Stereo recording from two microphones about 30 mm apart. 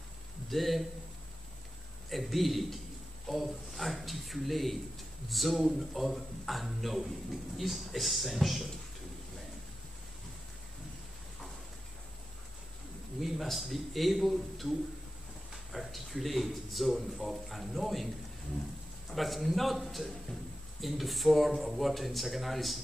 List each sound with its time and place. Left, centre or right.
0.5 s speech: centre
2.0 s speech: centre
13.2 s speech: centre
19.1 s speech: centre